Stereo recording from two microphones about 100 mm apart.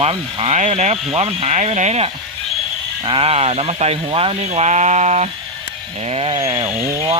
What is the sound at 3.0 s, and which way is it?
Speech, 65° right (ahead or behind).